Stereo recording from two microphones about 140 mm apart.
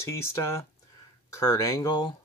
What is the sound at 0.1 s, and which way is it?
Speech, 20° left (ahead or behind).